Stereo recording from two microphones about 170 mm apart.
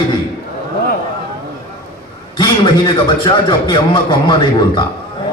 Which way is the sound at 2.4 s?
25° left (ahead or behind).